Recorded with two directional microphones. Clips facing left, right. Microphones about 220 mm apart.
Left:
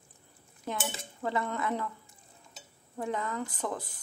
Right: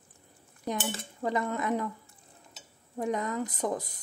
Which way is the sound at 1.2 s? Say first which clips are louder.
Right 2 dB; 15° right (ahead or behind).